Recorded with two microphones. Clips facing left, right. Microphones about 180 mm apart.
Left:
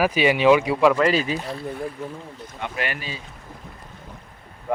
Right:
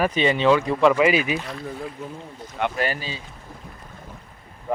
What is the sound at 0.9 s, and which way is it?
Speech, 10° right (ahead or behind).